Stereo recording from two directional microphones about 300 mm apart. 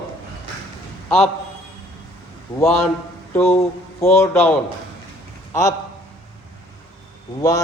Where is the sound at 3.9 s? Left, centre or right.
Centre.